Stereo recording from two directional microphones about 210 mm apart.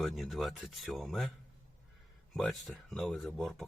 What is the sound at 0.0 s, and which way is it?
Speech, centre (ahead or behind).